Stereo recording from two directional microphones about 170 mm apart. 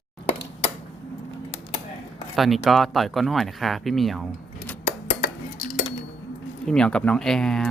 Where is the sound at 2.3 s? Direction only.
Centre (ahead or behind).